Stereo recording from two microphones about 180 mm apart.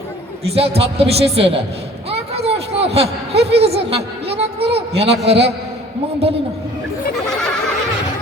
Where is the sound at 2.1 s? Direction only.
35° right (ahead or behind).